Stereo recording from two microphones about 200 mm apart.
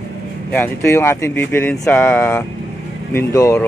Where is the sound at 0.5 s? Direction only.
10° left (ahead or behind).